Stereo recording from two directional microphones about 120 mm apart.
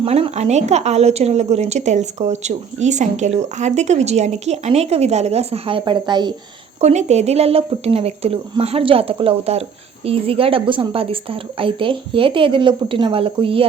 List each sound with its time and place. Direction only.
0.0 s a woman's voice: 60° right (ahead or behind); by 6.3 s 40° right (ahead or behind)
6.8 s a woman's voice: 65° right (ahead or behind); by 13.7 s 50° right (ahead or behind)